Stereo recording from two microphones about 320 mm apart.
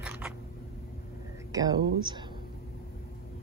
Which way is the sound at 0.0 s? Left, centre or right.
Centre.